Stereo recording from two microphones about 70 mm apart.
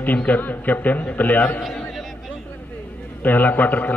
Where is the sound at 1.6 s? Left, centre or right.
Centre.